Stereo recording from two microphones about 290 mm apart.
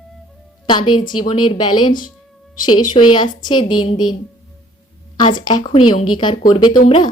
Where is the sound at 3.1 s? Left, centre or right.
Centre.